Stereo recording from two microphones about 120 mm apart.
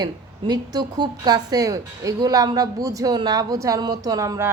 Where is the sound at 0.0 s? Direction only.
35° right (ahead or behind).